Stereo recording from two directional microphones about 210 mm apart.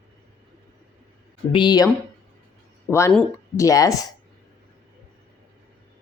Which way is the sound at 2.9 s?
15° left (ahead or behind).